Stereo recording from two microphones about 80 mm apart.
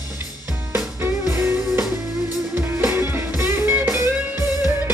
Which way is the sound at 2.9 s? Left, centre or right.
Right.